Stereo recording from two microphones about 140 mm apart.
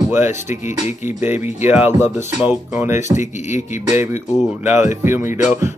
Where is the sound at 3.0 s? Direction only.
60° left (ahead or behind).